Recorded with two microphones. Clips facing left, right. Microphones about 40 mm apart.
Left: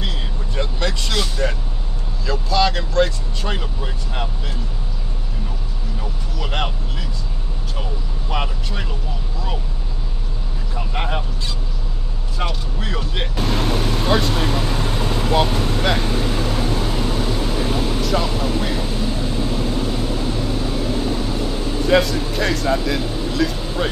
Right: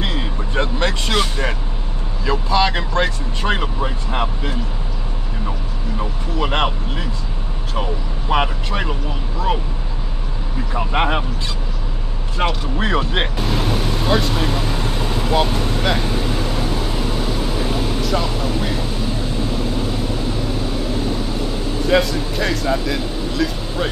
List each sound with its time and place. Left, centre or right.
0.0 s vehicle: right
2.2 s speech: right
5.9 s speech: right
10.7 s speech: right
12.7 s speech: right
13.4 s vehicle: centre
21.8 s speech: centre